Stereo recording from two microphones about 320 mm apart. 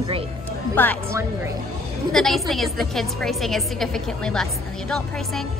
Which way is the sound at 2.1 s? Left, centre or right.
Centre.